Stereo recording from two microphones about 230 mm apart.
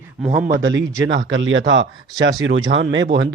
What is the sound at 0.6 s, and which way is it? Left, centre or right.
A man's voice, right.